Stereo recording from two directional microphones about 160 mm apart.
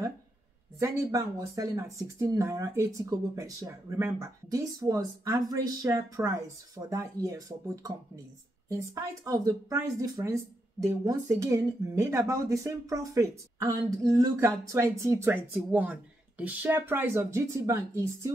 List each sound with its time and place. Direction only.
0.7 s speech: 20° right (ahead or behind)